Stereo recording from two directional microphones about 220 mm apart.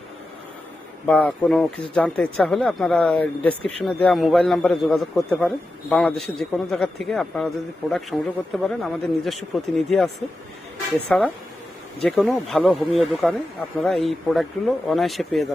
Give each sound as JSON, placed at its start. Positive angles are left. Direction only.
{"t": 1.0, "sound": "a man's voice", "side_deg": 5}
{"t": 11.1, "sound": "a man's voice", "side_deg": 5}